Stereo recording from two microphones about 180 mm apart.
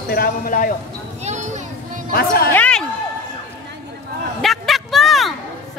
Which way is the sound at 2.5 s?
10° left (ahead or behind).